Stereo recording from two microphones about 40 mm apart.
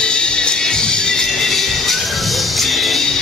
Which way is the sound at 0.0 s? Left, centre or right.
Left.